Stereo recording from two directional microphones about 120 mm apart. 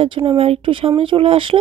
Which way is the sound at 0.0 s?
50° right (ahead or behind).